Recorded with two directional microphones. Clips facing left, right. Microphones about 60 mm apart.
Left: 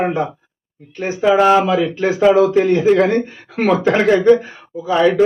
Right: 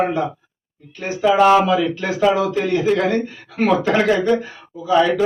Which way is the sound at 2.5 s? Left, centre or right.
Left.